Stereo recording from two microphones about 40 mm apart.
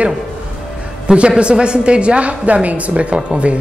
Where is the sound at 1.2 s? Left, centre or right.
Right.